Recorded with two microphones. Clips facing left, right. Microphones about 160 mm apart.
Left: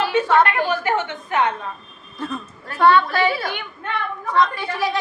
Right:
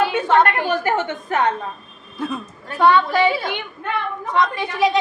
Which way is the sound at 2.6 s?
15° right (ahead or behind).